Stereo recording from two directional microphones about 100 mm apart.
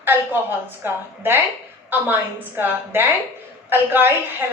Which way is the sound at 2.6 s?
20° right (ahead or behind).